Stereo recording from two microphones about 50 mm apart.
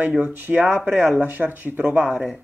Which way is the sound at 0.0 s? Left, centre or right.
Right.